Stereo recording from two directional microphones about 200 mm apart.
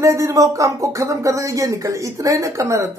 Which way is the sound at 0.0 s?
15° right (ahead or behind).